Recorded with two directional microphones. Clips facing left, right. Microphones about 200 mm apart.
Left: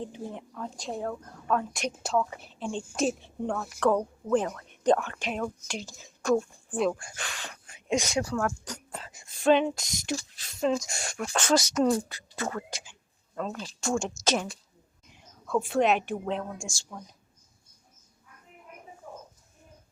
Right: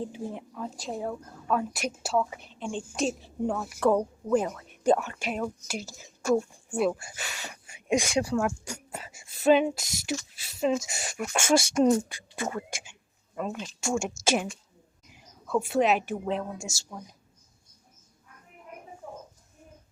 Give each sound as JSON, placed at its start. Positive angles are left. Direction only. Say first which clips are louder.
{"t": 0.0, "sound": "speech", "louder": "right 2 dB", "side_deg": -5}
{"t": 11.5, "sound": "speech", "louder": "right 2 dB", "side_deg": -25}
{"t": 12.4, "sound": "speech", "louder": "right 1 dB", "side_deg": -15}
{"t": 15.1, "sound": "a woman's voice", "louder": "even", "side_deg": -5}